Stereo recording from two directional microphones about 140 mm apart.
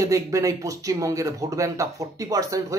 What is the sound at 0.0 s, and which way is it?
Speech, 25° right (ahead or behind).